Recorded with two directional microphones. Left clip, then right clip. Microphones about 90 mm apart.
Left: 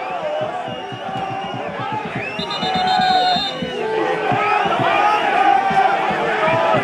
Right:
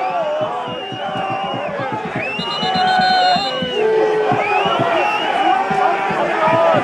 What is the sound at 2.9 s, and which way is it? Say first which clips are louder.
Music: right 1 dB; 5° right (ahead or behind).